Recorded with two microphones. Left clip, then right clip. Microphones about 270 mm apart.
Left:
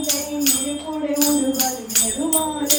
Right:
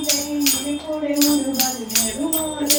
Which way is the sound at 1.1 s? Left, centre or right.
Right.